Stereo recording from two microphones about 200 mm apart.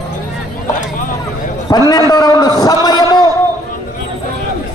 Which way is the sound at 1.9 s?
20° left (ahead or behind).